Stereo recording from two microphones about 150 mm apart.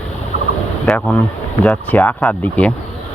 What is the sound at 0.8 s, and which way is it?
Speech, 5° left (ahead or behind).